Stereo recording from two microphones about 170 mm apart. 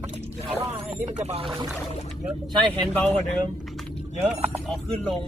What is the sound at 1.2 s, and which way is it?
Speech, 35° right (ahead or behind).